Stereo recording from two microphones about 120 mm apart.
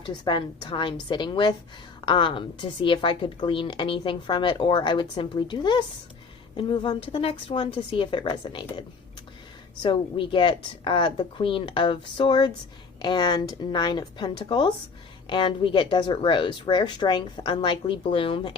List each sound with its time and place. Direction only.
0.0 s a woman's voice: 40° left (ahead or behind)
9.8 s a woman's voice: 45° left (ahead or behind)